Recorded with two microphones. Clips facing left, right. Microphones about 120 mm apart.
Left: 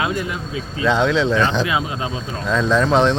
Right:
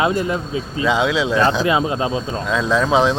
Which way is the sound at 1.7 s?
30° right (ahead or behind).